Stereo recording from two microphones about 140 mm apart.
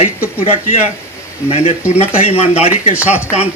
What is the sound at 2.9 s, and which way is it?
Speech, 10° right (ahead or behind).